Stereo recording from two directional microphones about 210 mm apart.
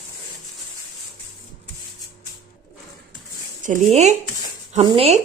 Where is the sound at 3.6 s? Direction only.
35° right (ahead or behind).